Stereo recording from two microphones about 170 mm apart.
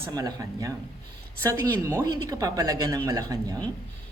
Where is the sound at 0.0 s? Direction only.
20° right (ahead or behind).